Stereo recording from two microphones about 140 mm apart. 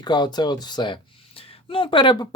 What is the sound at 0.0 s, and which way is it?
Speech, 30° left (ahead or behind).